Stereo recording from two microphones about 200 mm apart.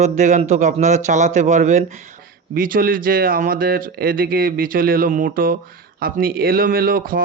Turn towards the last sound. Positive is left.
turn(degrees=-45)  # may be behind; listen again after turning